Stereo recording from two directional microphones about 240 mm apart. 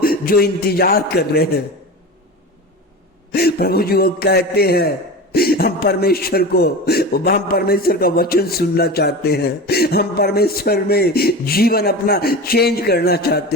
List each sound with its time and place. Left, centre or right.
0.0 s a man's voice: left
3.3 s a man's voice: left